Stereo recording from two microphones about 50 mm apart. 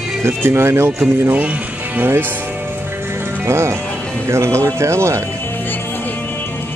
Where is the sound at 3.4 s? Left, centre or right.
Right.